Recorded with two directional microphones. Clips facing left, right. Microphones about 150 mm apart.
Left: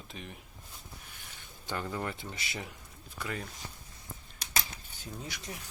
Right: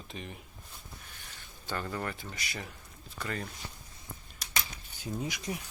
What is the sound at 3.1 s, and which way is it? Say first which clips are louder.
Speech: right 1 dB; 10° left (ahead or behind).